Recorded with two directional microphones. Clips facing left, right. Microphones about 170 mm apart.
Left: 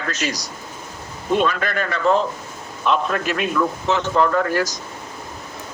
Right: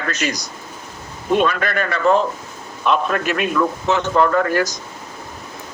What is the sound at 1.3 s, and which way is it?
Speech, 60° right (ahead or behind).